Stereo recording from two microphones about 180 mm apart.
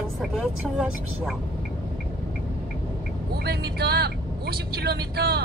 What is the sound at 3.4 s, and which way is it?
Speech, 65° right (ahead or behind).